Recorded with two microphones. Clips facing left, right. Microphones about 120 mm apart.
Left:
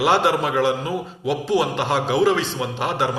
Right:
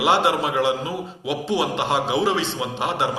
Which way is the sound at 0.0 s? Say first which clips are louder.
Left 1 dB; 20° right (ahead or behind).